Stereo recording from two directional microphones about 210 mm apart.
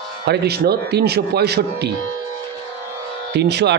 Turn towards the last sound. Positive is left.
turn(degrees=-50)  # may be behind; listen again after turning